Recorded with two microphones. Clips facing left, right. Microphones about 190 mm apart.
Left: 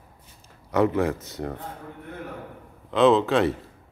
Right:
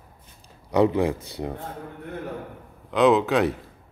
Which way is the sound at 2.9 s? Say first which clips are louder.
Even; centre (ahead or behind).